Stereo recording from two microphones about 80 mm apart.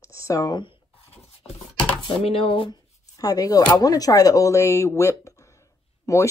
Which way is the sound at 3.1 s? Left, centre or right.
Left.